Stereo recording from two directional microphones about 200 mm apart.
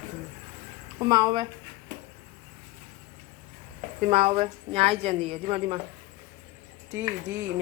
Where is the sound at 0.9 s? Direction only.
20° right (ahead or behind).